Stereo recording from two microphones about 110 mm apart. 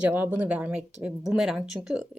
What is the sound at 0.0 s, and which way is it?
Speech, 15° right (ahead or behind).